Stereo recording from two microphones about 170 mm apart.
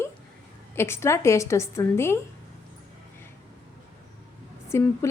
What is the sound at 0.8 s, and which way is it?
Speech, 15° left (ahead or behind).